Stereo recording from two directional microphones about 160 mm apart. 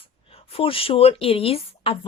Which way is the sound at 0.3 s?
35° left (ahead or behind).